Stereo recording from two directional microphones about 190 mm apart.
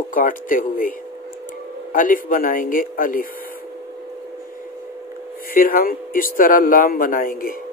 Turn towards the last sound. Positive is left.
turn(degrees=50)  # may be behind; listen again after turning